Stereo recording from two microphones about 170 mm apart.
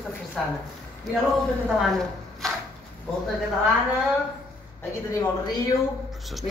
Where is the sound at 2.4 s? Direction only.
Centre (ahead or behind).